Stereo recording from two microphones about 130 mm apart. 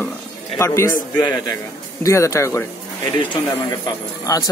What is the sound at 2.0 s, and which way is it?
Speech, 25° left (ahead or behind).